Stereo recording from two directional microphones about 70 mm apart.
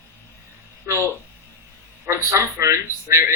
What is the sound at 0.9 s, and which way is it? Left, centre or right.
A man's voice, right.